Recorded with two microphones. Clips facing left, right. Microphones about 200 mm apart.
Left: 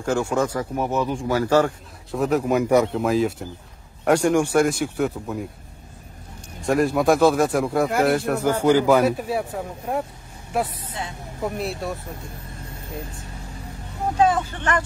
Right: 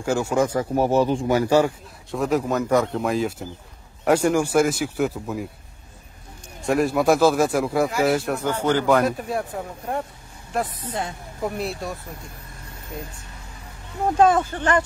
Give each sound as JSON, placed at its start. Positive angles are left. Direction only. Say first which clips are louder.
{"t": 0.0, "sound": "speech", "louder": "right 1 dB", "side_deg": -10}
{"t": 0.5, "sound": "speech", "louder": "right 4 dB", "side_deg": -30}
{"t": 2.0, "sound": "a man's voice", "louder": "left 1 dB", "side_deg": 0}
{"t": 6.6, "sound": "a man's voice", "louder": "left 1 dB", "side_deg": 0}
{"t": 14.2, "sound": "speech", "louder": "right 2 dB", "side_deg": -45}